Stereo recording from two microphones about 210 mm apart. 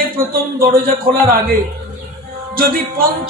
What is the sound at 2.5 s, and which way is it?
Speech, 45° right (ahead or behind).